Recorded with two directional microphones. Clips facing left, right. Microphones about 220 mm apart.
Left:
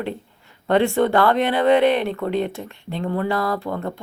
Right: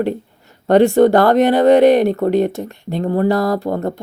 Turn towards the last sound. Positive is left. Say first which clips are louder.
# right 6 dB
turn(degrees=-40)  # may be behind; listen again after turning